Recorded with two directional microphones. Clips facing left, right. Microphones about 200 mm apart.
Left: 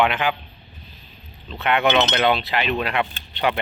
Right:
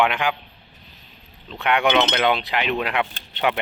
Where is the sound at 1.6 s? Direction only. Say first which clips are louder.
Even; 15° right (ahead or behind).